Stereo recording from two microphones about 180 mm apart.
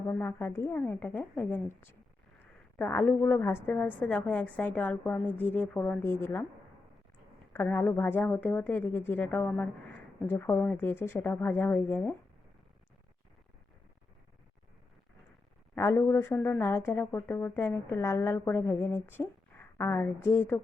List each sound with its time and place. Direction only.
0.1 s speech: 10° left (ahead or behind)
7.5 s speech: 10° left (ahead or behind)
15.7 s speech: 15° left (ahead or behind)